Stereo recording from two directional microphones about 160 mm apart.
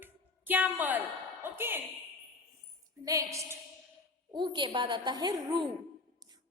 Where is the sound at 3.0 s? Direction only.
20° right (ahead or behind).